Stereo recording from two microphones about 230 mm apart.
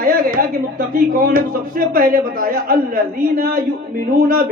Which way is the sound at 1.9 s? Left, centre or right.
Right.